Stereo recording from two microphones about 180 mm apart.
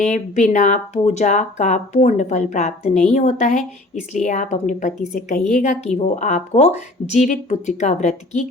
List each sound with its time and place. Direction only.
0.0 s a woman's voice: 40° left (ahead or behind)